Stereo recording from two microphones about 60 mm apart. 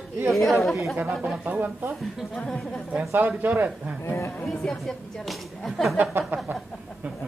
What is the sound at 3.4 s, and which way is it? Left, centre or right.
Speech, right.